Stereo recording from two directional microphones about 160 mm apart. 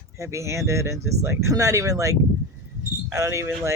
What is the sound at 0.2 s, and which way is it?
Speech, 20° right (ahead or behind).